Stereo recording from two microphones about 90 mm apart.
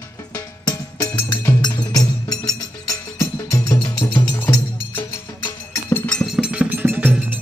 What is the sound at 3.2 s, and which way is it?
Music, 35° left (ahead or behind).